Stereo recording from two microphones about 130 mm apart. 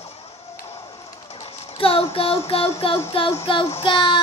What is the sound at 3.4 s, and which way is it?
Speech, 40° left (ahead or behind).